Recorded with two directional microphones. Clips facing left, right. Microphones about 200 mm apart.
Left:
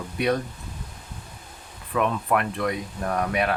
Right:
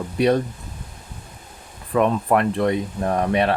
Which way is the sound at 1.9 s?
35° right (ahead or behind).